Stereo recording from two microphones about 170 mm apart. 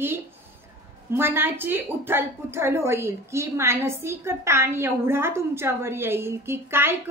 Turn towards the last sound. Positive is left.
turn(degrees=-15)  # may be behind; listen again after turning